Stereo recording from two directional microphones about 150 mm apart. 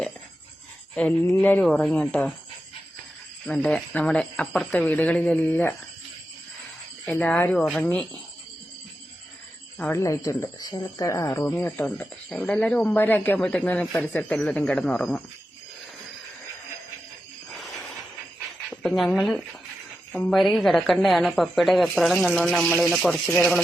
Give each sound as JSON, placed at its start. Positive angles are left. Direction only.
{"t": 0.9, "sound": "speech", "side_deg": 5}
{"t": 3.4, "sound": "speech", "side_deg": 5}
{"t": 7.0, "sound": "speech", "side_deg": 10}
{"t": 9.7, "sound": "speech", "side_deg": 10}
{"t": 10.0, "sound": "speech", "side_deg": 20}
{"t": 18.7, "sound": "a woman's voice", "side_deg": 5}